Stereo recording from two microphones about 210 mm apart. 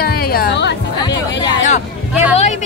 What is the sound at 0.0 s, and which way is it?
Music, 45° left (ahead or behind).